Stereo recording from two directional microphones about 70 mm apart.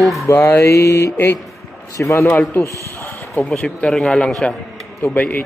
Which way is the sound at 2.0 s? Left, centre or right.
Left.